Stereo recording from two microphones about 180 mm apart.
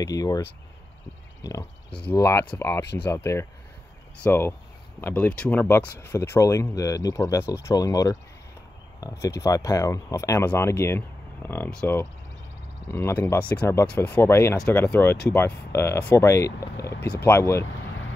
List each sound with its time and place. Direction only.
0.0 s speech: 20° left (ahead or behind)
16.9 s speech: 65° left (ahead or behind)
17.2 s speech: 15° left (ahead or behind)